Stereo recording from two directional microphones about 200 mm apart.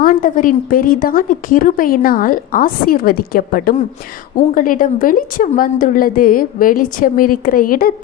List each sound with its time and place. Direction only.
0.0 s a woman's voice: 40° left (ahead or behind)